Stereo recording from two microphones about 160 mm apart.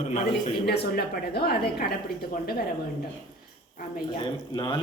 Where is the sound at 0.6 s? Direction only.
90° left.